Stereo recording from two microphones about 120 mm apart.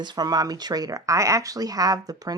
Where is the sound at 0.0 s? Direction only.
35° right (ahead or behind).